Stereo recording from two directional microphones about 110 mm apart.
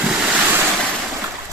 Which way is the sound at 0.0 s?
5° right (ahead or behind).